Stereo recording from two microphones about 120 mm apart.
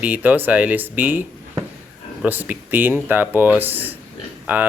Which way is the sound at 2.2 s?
15° right (ahead or behind).